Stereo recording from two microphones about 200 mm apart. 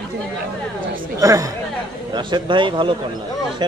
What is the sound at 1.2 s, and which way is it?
A man's voice, 15° right (ahead or behind).